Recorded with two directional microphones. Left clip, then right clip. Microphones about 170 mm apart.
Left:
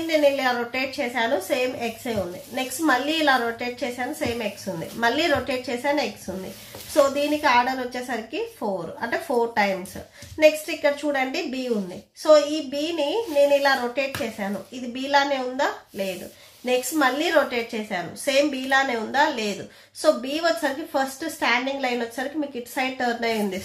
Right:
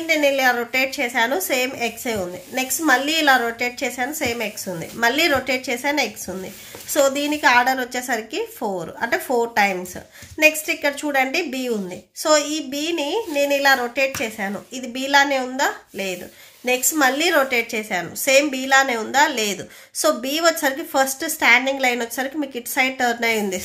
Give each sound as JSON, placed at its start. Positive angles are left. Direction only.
{"t": 0.1, "sound": "a woman's voice", "side_deg": -25}